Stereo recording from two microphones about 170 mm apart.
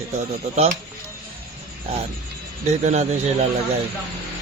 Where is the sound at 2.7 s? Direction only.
40° right (ahead or behind).